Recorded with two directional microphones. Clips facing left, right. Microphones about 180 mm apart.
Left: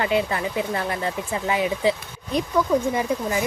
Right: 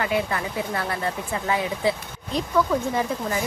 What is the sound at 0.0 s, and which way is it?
A woman's voice, 25° left (ahead or behind).